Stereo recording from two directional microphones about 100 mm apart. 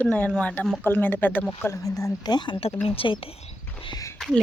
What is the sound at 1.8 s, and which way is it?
Speech, 35° left (ahead or behind).